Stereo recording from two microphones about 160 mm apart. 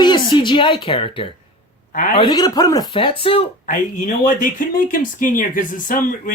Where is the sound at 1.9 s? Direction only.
55° left (ahead or behind).